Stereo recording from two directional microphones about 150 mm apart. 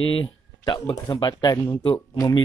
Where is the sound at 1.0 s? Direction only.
30° left (ahead or behind).